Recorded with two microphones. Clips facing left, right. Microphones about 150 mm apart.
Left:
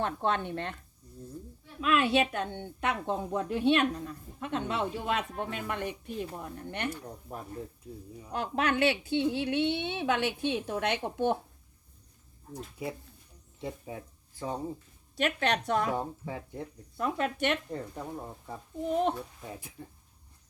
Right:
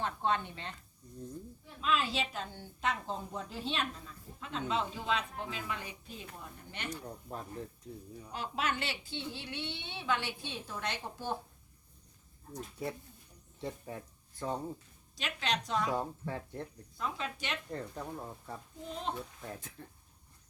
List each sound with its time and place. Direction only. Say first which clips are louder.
0.0 s a woman's voice: left 3 dB; 60° left (ahead or behind)
1.8 s a woman's voice: left 7 dB; 65° left (ahead or behind)
6.9 s speech: left 1 dB; 5° left (ahead or behind)
8.3 s a woman's voice: left 6 dB; 55° left (ahead or behind)
12.5 s speech: left 2 dB; 10° left (ahead or behind)
15.2 s a woman's voice: left 7 dB; 55° left (ahead or behind)
16.0 s speech: left 2 dB; 15° left (ahead or behind)
17.0 s a woman's voice: left 9 dB; 60° left (ahead or behind)
17.7 s speech: left 3 dB; 10° left (ahead or behind)
18.9 s a woman's voice: left 11 dB; 60° left (ahead or behind)
19.4 s speech: left 2 dB; 10° left (ahead or behind)